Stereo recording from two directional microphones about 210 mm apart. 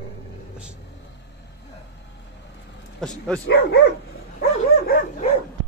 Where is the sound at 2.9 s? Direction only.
5° left (ahead or behind).